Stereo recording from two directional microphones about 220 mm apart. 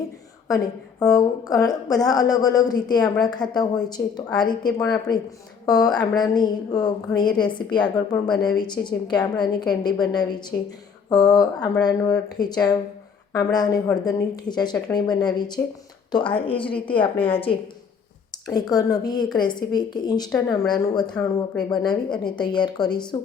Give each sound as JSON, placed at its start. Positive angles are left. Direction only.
{"t": 0.4, "sound": "a woman's voice", "side_deg": 15}